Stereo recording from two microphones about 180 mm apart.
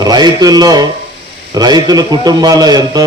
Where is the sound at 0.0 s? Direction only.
20° right (ahead or behind).